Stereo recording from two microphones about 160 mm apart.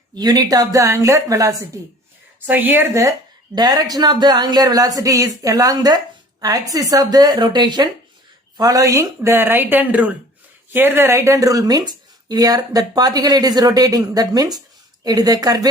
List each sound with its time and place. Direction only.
0.2 s a woman's voice: 25° right (ahead or behind)